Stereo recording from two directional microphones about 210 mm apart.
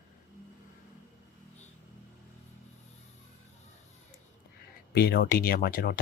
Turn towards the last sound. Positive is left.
turn(degrees=45)  # may be behind; listen again after turning